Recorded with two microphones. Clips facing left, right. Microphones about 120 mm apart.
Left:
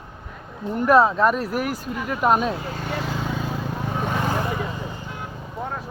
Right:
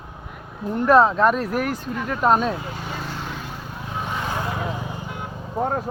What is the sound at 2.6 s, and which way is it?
Speech, 60° left (ahead or behind).